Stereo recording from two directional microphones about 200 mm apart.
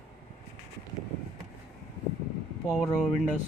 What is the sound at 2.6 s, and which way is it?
Speech, centre (ahead or behind).